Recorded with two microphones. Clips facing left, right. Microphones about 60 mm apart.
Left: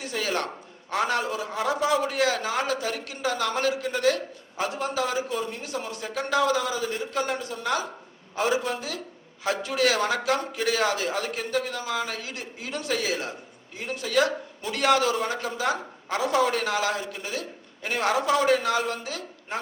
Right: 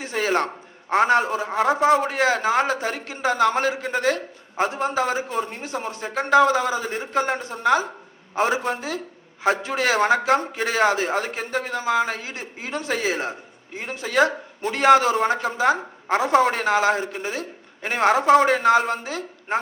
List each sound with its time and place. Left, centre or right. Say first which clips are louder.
0.0 s a man's voice: right 6 dB; right